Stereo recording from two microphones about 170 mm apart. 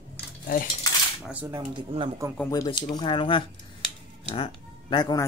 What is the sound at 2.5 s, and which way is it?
Speech, 25° left (ahead or behind).